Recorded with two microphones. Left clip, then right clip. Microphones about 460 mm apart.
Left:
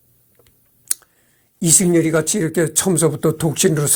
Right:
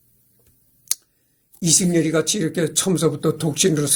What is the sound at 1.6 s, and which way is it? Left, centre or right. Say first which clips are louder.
A man's voice: left 3 dB; left.